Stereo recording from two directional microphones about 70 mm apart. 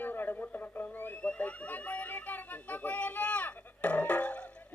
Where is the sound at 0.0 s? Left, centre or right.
Left.